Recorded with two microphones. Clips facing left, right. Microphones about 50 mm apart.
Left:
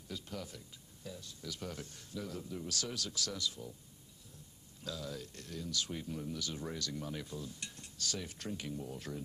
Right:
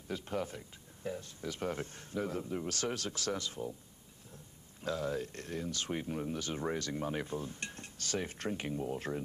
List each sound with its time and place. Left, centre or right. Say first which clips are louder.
0.1 s speech: right 7 dB; right
4.8 s speech: right 8 dB; right